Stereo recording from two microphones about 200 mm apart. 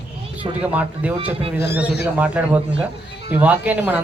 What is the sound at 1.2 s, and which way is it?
Speech, 30° right (ahead or behind).